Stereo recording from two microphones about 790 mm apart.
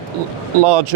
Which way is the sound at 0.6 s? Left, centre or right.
Right.